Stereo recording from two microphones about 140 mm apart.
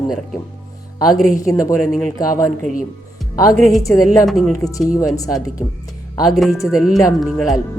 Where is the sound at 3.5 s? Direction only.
Centre (ahead or behind).